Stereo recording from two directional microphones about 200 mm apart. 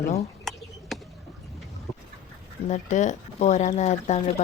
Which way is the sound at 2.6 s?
35° left (ahead or behind).